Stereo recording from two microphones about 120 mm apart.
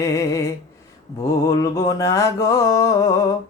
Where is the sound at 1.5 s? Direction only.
25° left (ahead or behind).